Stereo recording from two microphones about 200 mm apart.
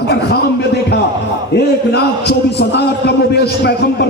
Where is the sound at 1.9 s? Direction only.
55° left (ahead or behind).